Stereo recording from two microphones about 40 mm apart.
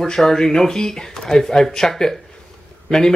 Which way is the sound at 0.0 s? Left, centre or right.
Centre.